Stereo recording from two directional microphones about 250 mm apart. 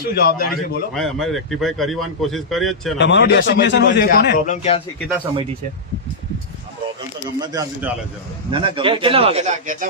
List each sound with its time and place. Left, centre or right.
0.0 s a man's voice: left
0.9 s speech: centre
3.0 s a man's voice: left
7.3 s speech: centre